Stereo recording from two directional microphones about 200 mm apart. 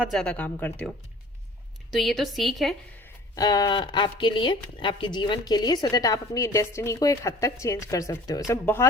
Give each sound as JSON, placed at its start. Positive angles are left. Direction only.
{"t": 0.0, "sound": "speech", "side_deg": 0}
{"t": 3.0, "sound": "a woman's voice", "side_deg": 20}